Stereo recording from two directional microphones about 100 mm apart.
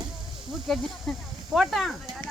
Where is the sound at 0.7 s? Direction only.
Centre (ahead or behind).